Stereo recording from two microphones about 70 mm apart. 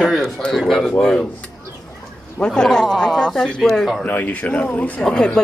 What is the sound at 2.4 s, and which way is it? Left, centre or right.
Speech, centre.